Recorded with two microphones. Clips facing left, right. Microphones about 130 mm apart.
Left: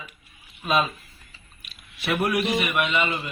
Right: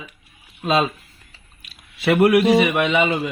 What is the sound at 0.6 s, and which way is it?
Speech, 90° right.